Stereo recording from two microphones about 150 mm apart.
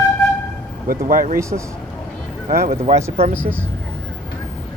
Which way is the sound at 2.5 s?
90° right.